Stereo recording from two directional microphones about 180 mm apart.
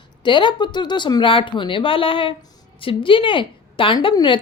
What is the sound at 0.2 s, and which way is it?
A woman's voice, 25° left (ahead or behind).